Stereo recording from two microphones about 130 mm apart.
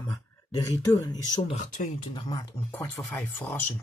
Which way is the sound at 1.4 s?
60° left (ahead or behind).